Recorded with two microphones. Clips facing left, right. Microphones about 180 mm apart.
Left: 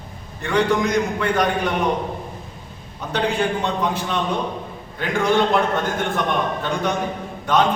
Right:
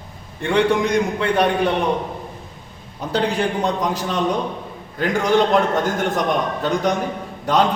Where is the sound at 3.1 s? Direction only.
35° right (ahead or behind).